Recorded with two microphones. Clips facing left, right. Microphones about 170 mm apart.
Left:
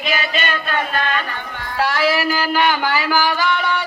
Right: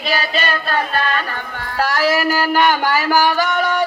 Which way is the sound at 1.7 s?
45° right (ahead or behind).